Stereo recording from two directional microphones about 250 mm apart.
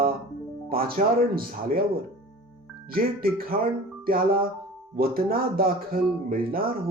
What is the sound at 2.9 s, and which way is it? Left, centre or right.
Speech, right.